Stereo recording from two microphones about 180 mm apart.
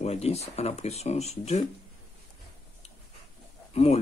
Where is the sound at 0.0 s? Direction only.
35° left (ahead or behind).